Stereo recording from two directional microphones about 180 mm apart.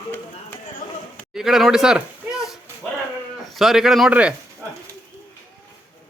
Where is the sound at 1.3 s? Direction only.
Centre (ahead or behind).